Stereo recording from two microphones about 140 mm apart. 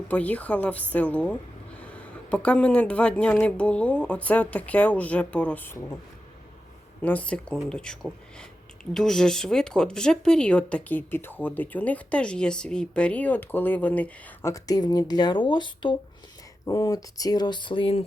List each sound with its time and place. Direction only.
0.1 s speech: 10° left (ahead or behind)
7.0 s speech: 10° left (ahead or behind)
14.5 s speech: 25° left (ahead or behind)